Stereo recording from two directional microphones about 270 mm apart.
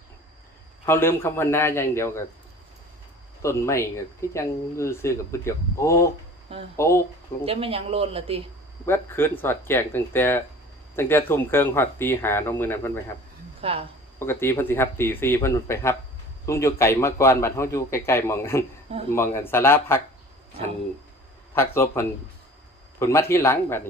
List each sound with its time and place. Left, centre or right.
0.9 s speech: centre
3.4 s speech: centre
7.4 s speech: right
8.9 s speech: centre
13.6 s speech: right
14.2 s speech: centre
21.5 s speech: centre